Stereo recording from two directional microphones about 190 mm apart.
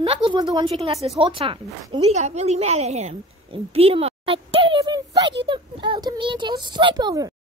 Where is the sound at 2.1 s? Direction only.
35° right (ahead or behind); by 7.3 s 20° right (ahead or behind).